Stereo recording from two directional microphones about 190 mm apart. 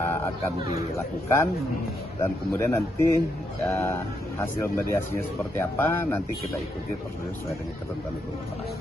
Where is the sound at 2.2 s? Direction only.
10° left (ahead or behind).